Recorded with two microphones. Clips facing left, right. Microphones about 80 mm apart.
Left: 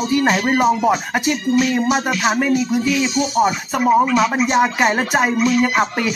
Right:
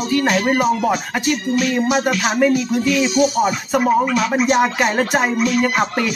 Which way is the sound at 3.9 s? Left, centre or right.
Centre.